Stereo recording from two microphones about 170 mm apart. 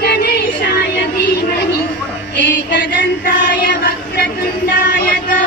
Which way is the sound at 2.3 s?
85° left.